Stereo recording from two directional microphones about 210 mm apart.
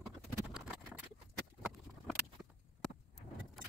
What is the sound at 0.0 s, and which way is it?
Vehicle, 5° right (ahead or behind).